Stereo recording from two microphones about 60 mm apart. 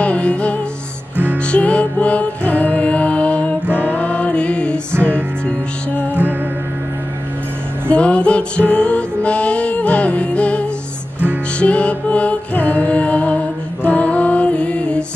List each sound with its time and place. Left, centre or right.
0.0 s music: left
1.1 s music: right
1.5 s music: left
3.6 s music: right
3.9 s music: left
7.9 s music: centre